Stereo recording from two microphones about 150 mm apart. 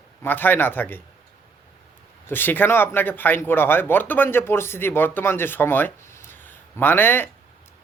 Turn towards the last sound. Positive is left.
turn(degrees=15)  # may be behind; listen again after turning